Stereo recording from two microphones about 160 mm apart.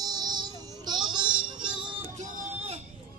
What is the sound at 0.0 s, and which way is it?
Music, 25° right (ahead or behind).